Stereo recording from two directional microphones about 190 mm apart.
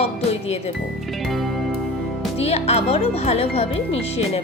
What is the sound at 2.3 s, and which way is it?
Speech, 30° left (ahead or behind).